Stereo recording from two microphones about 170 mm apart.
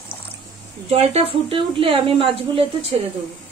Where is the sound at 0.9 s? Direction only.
35° right (ahead or behind).